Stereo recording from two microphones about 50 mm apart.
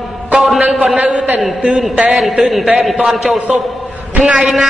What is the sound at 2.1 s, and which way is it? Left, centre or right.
A woman's voice, centre.